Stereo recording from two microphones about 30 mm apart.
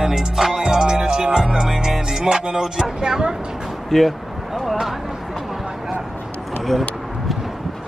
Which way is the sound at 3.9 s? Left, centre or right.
Centre.